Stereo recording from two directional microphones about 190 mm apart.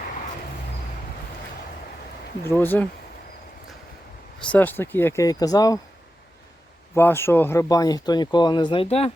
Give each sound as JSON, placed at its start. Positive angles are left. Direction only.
{"t": 2.4, "sound": "speech", "side_deg": 10}
{"t": 4.5, "sound": "speech", "side_deg": 10}
{"t": 6.9, "sound": "speech", "side_deg": 15}